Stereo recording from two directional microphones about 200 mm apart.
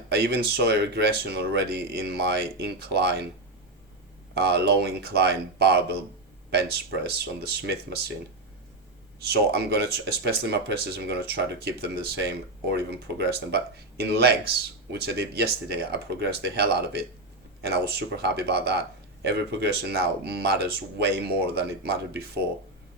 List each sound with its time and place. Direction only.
0.1 s speech: 55° right (ahead or behind)
4.4 s speech: 55° right (ahead or behind)
9.2 s speech: 50° right (ahead or behind)